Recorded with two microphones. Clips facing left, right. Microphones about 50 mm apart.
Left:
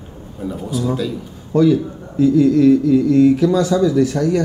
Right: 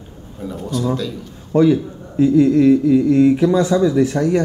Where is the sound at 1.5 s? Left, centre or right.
Right.